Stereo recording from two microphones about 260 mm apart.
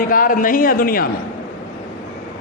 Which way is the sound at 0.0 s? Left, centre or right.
Left.